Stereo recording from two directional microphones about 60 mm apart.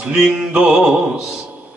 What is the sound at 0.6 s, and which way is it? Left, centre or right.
Music, centre.